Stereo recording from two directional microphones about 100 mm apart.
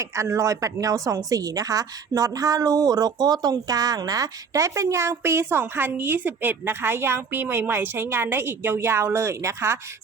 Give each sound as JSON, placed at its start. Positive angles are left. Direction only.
{"t": 0.0, "sound": "a woman's voice", "side_deg": -30}